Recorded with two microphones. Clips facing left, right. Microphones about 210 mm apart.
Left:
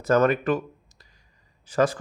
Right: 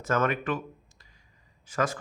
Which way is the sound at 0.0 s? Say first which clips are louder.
Left 7 dB; 35° left (ahead or behind).